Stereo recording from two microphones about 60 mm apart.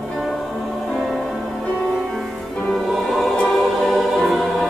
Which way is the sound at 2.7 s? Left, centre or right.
Centre.